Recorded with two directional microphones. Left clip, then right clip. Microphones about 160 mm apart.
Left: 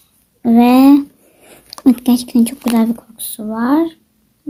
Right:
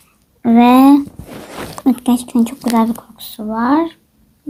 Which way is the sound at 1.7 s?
40° left (ahead or behind).